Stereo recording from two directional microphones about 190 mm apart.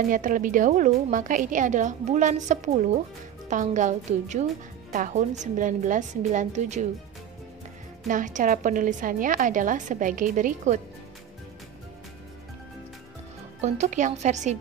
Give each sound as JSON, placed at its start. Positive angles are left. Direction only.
{"t": 0.1, "sound": "a woman's voice", "side_deg": -45}
{"t": 8.1, "sound": "a woman's voice", "side_deg": -45}
{"t": 13.6, "sound": "a woman's voice", "side_deg": -40}